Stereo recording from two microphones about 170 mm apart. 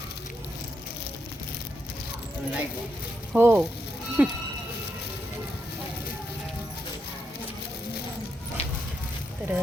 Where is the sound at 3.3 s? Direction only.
15° right (ahead or behind).